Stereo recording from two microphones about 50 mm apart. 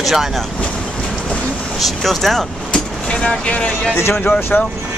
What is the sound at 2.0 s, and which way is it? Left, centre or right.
Speech, centre.